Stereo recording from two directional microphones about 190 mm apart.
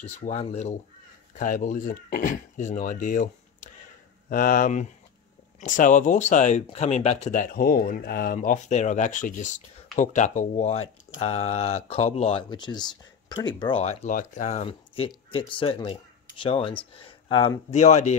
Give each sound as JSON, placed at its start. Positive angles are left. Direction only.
{"t": 0.2, "sound": "speech", "side_deg": 35}
{"t": 17.6, "sound": "speech", "side_deg": 35}